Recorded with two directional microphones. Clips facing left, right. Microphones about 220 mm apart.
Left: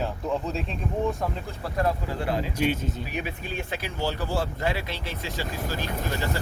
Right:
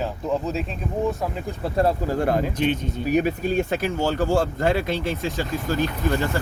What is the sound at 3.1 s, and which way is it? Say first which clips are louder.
Speech: right 12 dB; 45° right (ahead or behind).